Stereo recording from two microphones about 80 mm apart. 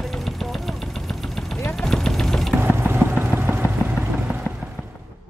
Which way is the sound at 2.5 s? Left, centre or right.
Right.